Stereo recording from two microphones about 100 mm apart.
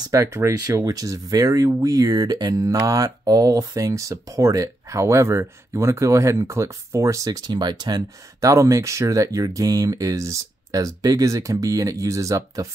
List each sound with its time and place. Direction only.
0.1 s speech: 25° right (ahead or behind)